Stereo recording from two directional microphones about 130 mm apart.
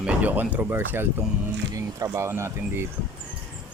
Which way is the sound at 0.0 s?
10° right (ahead or behind).